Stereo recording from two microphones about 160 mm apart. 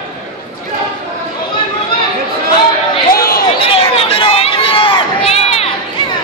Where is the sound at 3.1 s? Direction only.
65° left (ahead or behind).